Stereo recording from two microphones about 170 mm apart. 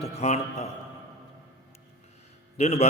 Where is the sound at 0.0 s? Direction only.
40° left (ahead or behind).